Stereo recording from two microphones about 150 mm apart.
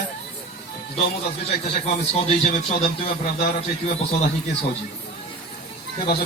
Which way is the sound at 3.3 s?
90° left.